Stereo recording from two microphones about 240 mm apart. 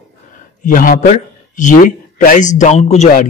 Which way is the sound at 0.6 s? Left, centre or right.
Left.